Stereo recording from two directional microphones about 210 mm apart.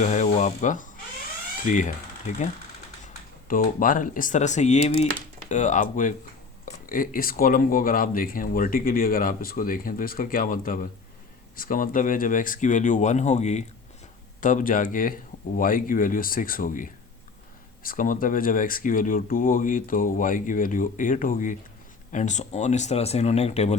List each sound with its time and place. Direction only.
0.0 s speech: 35° left (ahead or behind)
3.5 s speech: 40° left (ahead or behind)